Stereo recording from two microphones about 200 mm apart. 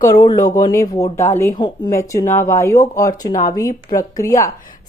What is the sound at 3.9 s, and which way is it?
Speech, 15° left (ahead or behind).